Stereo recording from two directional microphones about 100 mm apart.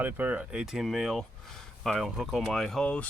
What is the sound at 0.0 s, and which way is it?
Speech, 20° right (ahead or behind).